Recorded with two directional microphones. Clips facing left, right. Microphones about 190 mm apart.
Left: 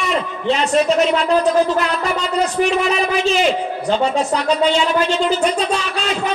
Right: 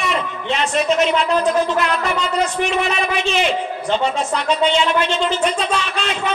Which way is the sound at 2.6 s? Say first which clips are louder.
Left 3 dB; 35° left (ahead or behind).